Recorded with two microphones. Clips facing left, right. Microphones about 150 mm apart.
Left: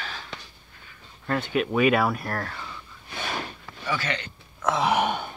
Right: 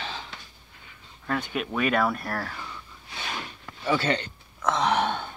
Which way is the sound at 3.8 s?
30° right (ahead or behind).